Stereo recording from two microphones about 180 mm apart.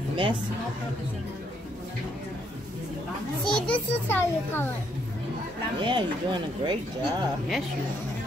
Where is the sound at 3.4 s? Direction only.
5° left (ahead or behind).